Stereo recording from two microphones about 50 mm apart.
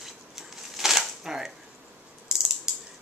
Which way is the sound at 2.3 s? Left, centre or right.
Centre.